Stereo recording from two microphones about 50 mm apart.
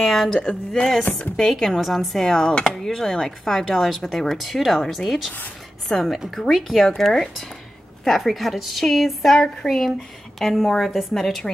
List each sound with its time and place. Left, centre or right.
0.0 s a woman's voice: centre
0.4 s speech: centre
1.3 s speech: centre
4.4 s a woman's voice: centre
6.5 s a woman's voice: centre
8.0 s a woman's voice: centre